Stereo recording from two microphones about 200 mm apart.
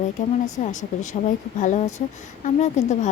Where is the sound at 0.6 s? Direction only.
35° left (ahead or behind).